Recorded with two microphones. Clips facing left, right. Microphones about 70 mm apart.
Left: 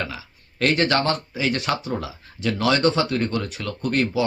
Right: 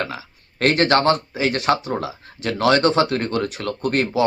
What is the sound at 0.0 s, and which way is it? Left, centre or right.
Speech, right.